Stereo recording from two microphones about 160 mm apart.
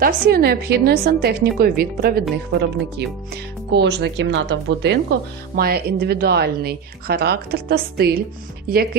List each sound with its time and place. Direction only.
0.0 s a woman's voice: 75° right (ahead or behind)
2.5 s speech: 90° right
5.5 s a woman's voice: 75° right (ahead or behind)